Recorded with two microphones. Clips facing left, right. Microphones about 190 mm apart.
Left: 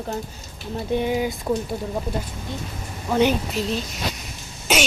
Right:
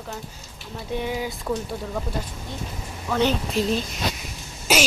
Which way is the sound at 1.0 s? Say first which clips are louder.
Left 3 dB; 20° left (ahead or behind).